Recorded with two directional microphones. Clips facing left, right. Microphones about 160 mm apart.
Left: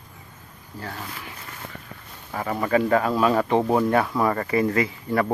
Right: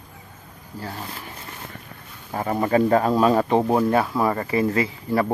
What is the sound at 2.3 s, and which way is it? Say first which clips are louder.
Speech: right 2 dB; 25° right (ahead or behind).